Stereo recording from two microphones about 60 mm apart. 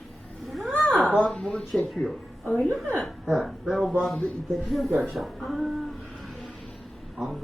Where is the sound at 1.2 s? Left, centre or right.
Centre.